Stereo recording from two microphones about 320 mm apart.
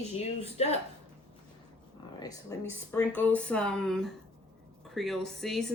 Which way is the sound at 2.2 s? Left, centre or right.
Centre.